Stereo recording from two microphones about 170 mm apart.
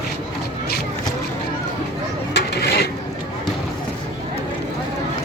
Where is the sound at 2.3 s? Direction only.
70° left (ahead or behind).